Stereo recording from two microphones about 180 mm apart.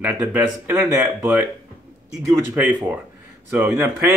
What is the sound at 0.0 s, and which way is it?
Speech, 10° right (ahead or behind).